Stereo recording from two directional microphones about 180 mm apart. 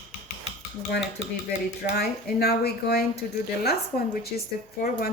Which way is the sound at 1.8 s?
60° left (ahead or behind).